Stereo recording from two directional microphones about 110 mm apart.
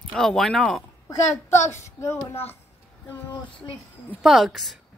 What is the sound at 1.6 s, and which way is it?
Speech, 90° left.